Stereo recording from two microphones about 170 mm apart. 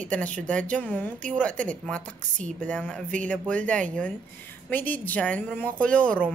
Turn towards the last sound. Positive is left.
turn(degrees=5)  # may be behind; listen again after turning